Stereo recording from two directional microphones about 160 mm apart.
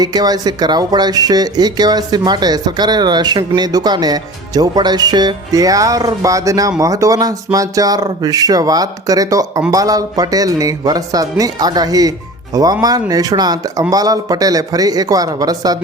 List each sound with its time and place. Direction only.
0.0 s speech: 25° right (ahead or behind)